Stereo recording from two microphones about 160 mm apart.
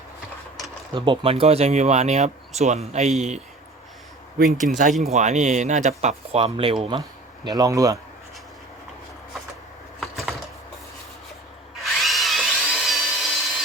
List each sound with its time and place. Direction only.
0.9 s speech: 30° right (ahead or behind)
4.9 s speech: centre (ahead or behind)
5.1 s speech: 45° right (ahead or behind)
7.4 s speech: 25° right (ahead or behind)
10.0 s typewriter: centre (ahead or behind)
11.8 s drill: centre (ahead or behind)